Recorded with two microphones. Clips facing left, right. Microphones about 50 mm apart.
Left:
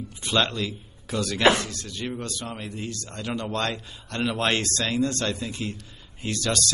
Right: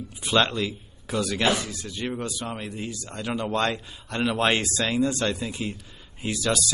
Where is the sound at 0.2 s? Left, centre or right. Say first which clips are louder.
Right 2 dB; centre.